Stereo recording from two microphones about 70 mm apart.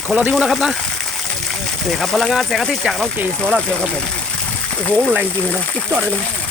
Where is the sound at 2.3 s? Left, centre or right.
Centre.